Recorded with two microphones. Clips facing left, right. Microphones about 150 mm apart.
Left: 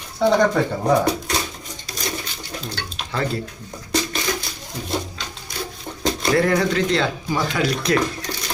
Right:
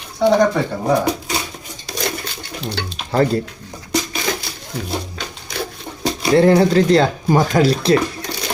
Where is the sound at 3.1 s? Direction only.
40° right (ahead or behind).